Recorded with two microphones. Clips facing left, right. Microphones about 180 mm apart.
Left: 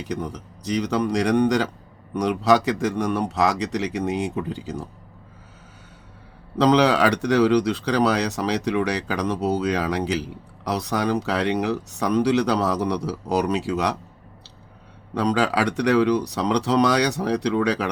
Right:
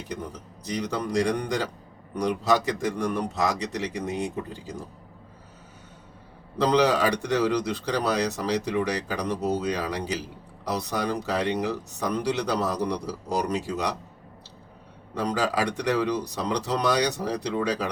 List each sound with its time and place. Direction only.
0.0 s speech: 70° left (ahead or behind)
6.6 s speech: 70° left (ahead or behind)
15.1 s speech: 70° left (ahead or behind)